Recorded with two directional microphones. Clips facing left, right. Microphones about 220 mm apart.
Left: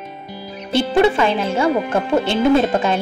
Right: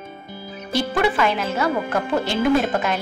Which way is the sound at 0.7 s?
25° left (ahead or behind).